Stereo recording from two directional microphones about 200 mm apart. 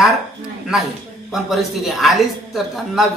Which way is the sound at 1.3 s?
Centre (ahead or behind).